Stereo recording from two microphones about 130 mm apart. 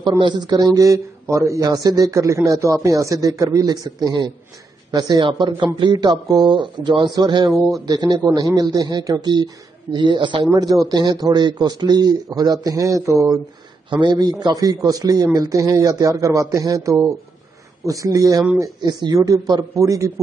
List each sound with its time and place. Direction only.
0.2 s speech: 35° right (ahead or behind)
13.8 s speech: 35° right (ahead or behind)